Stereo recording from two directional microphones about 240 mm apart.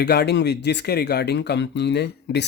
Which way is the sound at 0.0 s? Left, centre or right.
Left.